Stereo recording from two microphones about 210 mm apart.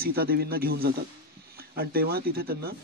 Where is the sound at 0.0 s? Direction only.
45° right (ahead or behind).